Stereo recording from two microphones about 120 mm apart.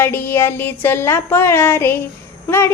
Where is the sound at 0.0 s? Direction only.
20° left (ahead or behind).